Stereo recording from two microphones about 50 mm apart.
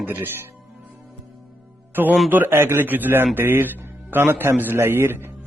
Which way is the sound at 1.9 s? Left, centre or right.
Right.